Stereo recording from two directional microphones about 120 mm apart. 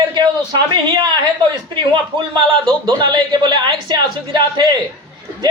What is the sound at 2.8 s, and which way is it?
A man's voice, 40° right (ahead or behind).